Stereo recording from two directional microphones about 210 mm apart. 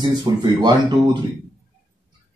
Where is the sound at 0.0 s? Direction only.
20° right (ahead or behind).